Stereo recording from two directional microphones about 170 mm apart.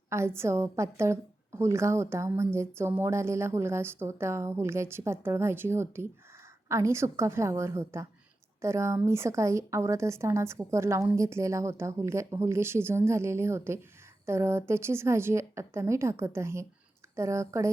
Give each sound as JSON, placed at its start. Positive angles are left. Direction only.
{"t": 0.1, "sound": "a woman's voice", "side_deg": -15}